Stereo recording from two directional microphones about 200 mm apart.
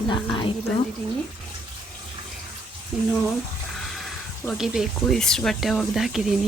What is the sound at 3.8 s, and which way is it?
Speech, centre (ahead or behind).